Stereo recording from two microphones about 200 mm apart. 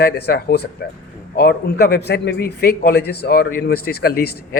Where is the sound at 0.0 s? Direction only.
55° left (ahead or behind).